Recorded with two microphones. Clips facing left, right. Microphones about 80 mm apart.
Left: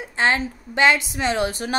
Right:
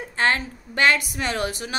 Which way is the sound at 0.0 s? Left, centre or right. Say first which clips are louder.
Left 2 dB; centre.